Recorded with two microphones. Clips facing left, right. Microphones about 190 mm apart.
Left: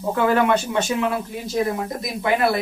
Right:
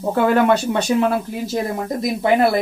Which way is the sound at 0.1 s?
35° right (ahead or behind).